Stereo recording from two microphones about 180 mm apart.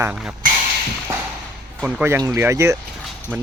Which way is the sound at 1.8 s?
5° right (ahead or behind).